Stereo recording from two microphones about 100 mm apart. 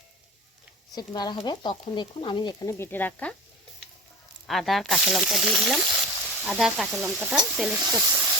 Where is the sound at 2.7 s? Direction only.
25° left (ahead or behind).